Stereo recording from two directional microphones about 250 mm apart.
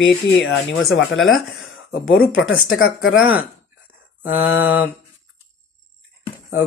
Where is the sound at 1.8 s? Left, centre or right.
Left.